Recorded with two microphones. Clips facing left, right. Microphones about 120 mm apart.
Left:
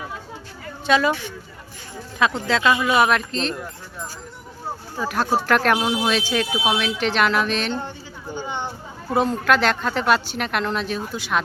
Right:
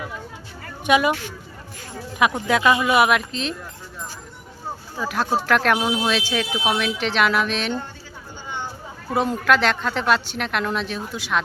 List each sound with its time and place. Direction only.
0.9 s speech: 15° right (ahead or behind)
2.1 s speech: 15° right (ahead or behind)
4.9 s speech: centre (ahead or behind)
9.1 s speech: 5° right (ahead or behind)